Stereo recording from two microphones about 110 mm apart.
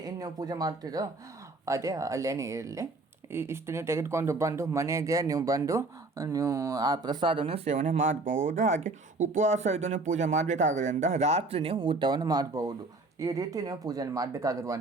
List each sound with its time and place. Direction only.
0.0 s speech: 35° right (ahead or behind)